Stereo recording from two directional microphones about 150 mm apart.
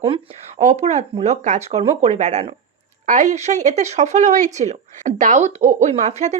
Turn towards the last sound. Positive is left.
turn(degrees=-50)  # may be behind; listen again after turning